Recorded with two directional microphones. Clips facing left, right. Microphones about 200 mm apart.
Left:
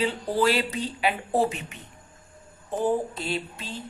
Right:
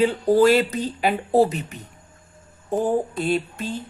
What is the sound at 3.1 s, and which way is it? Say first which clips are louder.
Speech: right 8 dB; 50° right (ahead or behind).